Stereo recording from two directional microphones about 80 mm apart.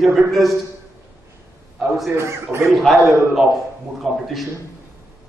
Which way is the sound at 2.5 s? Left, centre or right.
Right.